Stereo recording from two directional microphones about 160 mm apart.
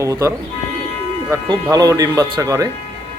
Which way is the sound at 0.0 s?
20° right (ahead or behind).